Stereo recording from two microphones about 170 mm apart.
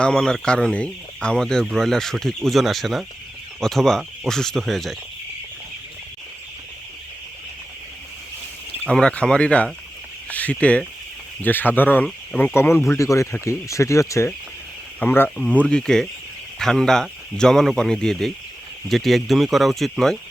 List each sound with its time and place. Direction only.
0.0 s speech: 5° left (ahead or behind)
8.9 s speech: 5° left (ahead or behind)
12.5 s speech: 15° left (ahead or behind)